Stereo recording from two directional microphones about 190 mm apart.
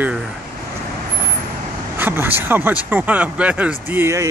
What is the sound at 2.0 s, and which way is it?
Speech, 10° right (ahead or behind).